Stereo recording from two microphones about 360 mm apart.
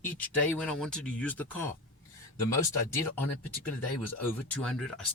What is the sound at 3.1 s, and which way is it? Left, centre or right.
Speech, left.